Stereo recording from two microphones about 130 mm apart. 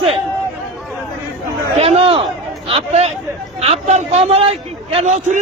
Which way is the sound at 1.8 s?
50° right (ahead or behind).